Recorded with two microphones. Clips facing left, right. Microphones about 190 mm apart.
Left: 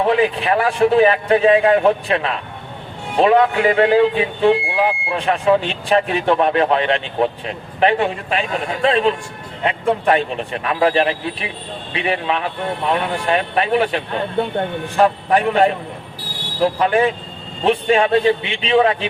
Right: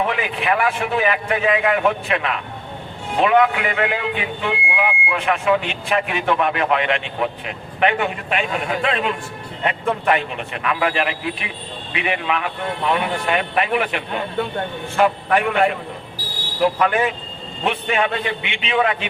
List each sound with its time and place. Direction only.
0.0 s speech: 30° left (ahead or behind)